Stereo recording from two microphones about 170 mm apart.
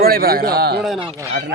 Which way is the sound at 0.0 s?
65° right (ahead or behind).